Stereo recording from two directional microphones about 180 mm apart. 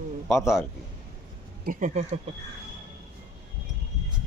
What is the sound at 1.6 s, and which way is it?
Speech, 45° right (ahead or behind).